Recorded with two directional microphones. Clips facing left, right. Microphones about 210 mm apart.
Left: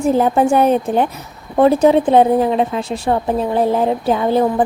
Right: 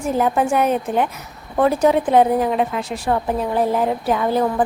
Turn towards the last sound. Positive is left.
turn(degrees=25)  # may be behind; listen again after turning